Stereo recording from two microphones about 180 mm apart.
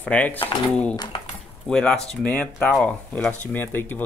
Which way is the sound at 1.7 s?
5° left (ahead or behind).